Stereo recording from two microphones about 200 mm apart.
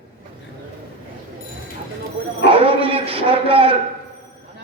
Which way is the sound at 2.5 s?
25° right (ahead or behind).